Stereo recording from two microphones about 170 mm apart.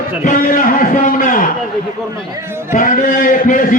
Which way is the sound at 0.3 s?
55° left (ahead or behind).